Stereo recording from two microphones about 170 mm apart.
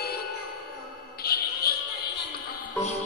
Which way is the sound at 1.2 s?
65° left (ahead or behind).